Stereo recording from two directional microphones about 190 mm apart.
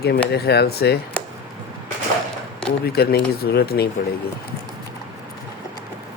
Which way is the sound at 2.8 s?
55° left (ahead or behind).